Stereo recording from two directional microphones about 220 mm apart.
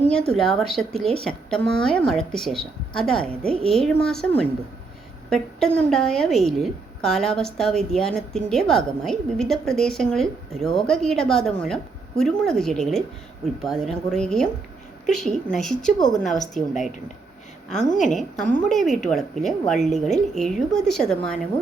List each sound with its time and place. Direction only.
0.1 s a woman's voice: 5° left (ahead or behind)
0.9 s a woman's voice: 25° right (ahead or behind)
1.2 s a woman's voice: 5° left (ahead or behind)
17.8 s a woman's voice: 35° left (ahead or behind)
18.1 s a woman's voice: centre (ahead or behind)